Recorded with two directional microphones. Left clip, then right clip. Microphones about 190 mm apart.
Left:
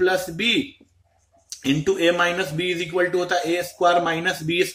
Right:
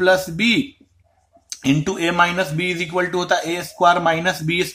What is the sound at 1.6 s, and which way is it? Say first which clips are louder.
Speech: left 1 dB; 35° right (ahead or behind).